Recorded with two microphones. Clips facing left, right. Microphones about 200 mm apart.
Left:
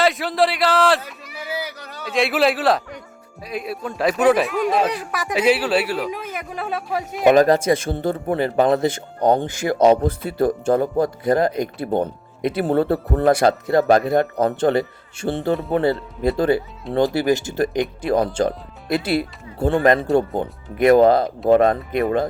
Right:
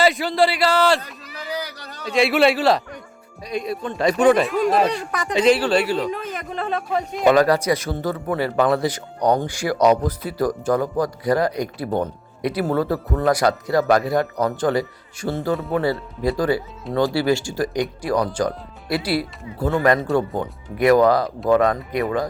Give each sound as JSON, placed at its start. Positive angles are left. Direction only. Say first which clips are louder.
{"t": 0.0, "sound": "a man's voice", "louder": "right 1 dB", "side_deg": 0}
{"t": 7.3, "sound": "speech", "louder": "left 2 dB", "side_deg": 20}